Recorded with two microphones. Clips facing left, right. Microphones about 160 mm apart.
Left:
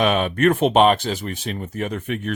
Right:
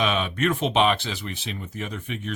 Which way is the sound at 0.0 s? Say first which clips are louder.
Left 6 dB; 50° left (ahead or behind).